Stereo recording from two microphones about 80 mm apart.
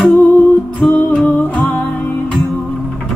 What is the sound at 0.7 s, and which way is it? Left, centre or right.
Music, left.